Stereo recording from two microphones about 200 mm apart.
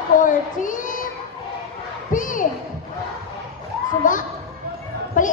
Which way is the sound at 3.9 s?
40° left (ahead or behind).